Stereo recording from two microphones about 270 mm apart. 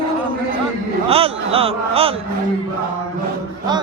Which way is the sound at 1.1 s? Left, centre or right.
Right.